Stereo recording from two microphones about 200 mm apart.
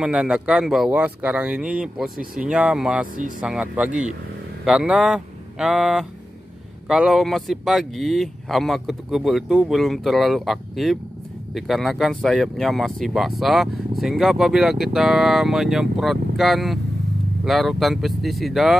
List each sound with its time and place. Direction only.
0.0 s speech: 5° right (ahead or behind)